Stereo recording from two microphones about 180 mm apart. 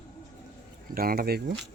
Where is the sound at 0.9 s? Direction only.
55° right (ahead or behind).